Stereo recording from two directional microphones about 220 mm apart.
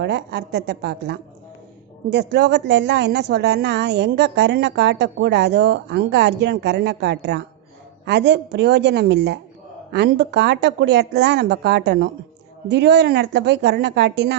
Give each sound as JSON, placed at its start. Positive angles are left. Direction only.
{"t": 0.0, "sound": "a woman's voice", "side_deg": -50}